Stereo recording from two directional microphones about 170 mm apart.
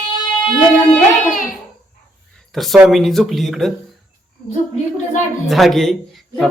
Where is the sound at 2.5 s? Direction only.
Centre (ahead or behind).